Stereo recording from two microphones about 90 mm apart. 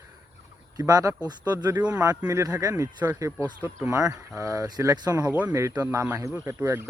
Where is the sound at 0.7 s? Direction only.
40° right (ahead or behind).